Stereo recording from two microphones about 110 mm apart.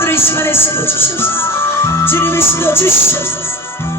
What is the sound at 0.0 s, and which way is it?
Music, 20° left (ahead or behind).